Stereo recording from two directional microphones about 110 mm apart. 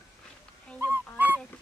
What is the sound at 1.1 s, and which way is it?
Dog, 15° right (ahead or behind).